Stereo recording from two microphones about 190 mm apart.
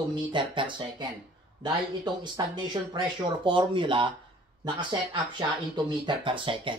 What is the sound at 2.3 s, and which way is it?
Speech, 25° right (ahead or behind).